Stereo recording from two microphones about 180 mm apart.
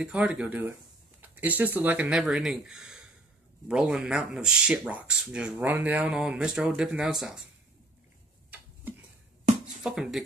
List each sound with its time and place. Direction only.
0.0 s speech: 5° right (ahead or behind)
9.8 s speech: 5° right (ahead or behind)